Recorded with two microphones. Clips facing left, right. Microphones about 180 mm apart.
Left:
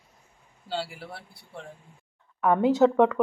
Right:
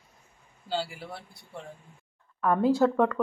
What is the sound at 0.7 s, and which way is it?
Speech, centre (ahead or behind).